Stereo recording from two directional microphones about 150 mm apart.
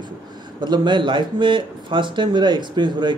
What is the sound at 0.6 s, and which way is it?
Speech, 30° right (ahead or behind).